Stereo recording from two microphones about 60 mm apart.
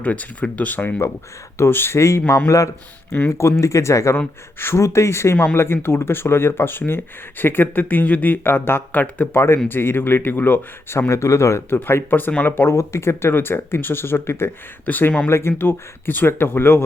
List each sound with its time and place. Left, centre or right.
0.0 s speech: left
2.0 s speech: left
3.2 s speech: left
9.6 s speech: left
11.1 s speech: left
12.7 s speech: left
14.8 s speech: left
15.3 s speech: left